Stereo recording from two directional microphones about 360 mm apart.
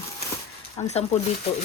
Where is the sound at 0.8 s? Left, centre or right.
Centre.